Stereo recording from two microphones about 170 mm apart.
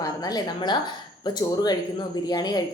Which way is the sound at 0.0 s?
20° left (ahead or behind).